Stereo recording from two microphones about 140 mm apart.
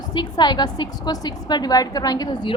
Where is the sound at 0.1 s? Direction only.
30° left (ahead or behind).